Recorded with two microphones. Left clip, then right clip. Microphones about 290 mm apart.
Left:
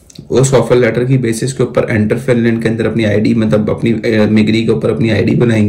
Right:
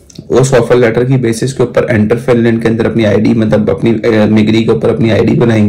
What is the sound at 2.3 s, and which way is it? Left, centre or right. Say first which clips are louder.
Speech: right 3 dB; right.